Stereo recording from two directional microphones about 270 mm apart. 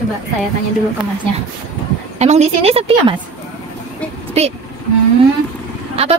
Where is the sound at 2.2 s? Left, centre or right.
Right.